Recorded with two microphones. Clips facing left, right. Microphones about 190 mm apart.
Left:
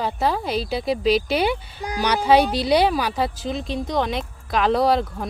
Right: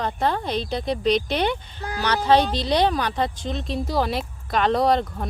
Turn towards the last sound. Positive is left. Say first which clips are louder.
# left 1 dB
turn(degrees=0)  # may be behind; listen again after turning